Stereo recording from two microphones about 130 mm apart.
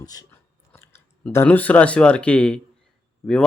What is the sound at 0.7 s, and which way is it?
Clicking, 15° left (ahead or behind).